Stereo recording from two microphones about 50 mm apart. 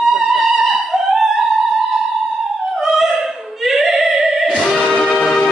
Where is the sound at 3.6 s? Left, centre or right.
Centre.